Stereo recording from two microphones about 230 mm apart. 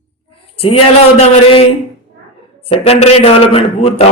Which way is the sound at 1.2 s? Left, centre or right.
Left.